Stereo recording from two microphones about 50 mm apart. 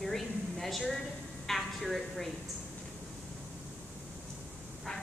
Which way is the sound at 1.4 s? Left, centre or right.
Centre.